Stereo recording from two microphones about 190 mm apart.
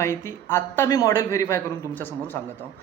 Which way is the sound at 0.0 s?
15° left (ahead or behind).